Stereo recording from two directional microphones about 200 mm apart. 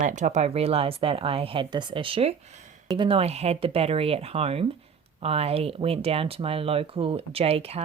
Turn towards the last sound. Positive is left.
turn(degrees=-30)  # may be behind; listen again after turning